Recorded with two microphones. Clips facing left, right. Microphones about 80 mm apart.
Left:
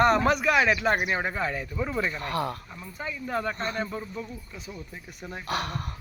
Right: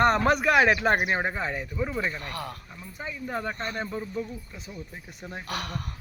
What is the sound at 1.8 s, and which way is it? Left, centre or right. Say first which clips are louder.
Speech: left 1 dB; centre.